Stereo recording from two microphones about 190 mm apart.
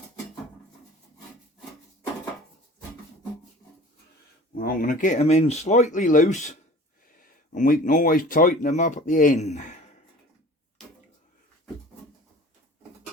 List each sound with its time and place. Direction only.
4.5 s speech: 50° left (ahead or behind)